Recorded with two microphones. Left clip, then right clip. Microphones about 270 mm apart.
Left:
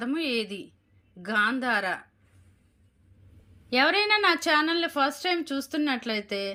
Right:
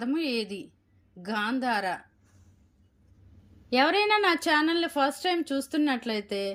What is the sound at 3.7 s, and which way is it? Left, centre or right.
Speech, centre.